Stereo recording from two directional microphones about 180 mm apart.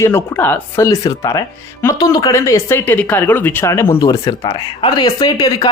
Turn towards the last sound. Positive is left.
turn(degrees=20)  # may be behind; listen again after turning